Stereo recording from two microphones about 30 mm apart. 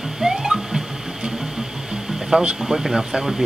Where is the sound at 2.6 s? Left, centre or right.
Centre.